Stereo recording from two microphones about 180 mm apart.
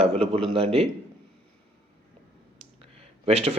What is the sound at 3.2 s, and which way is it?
Speech, 35° right (ahead or behind).